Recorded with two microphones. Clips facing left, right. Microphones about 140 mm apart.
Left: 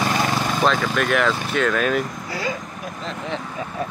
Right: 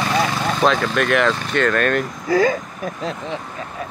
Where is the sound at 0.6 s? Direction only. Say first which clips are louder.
Right 3 dB; centre (ahead or behind).